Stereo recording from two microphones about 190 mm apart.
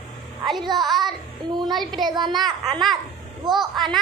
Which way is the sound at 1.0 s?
25° right (ahead or behind).